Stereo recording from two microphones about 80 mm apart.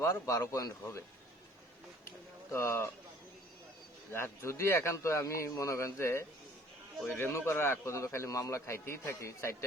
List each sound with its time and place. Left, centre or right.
0.1 s a man's voice: left
2.5 s a man's voice: left
4.1 s a man's voice: left